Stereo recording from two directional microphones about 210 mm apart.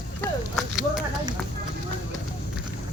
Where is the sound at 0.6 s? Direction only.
Centre (ahead or behind).